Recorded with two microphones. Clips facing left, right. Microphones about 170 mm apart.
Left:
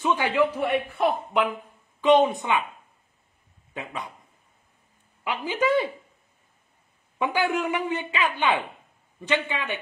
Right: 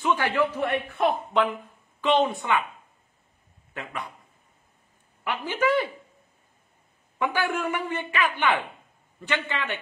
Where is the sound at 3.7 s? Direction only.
20° left (ahead or behind).